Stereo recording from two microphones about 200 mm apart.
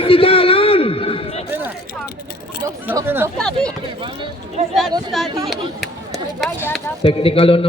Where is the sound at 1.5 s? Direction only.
10° right (ahead or behind).